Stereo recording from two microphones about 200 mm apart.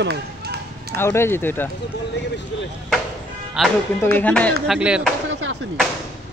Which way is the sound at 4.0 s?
10° left (ahead or behind).